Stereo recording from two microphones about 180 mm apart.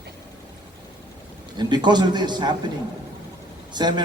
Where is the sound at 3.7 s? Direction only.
25° right (ahead or behind).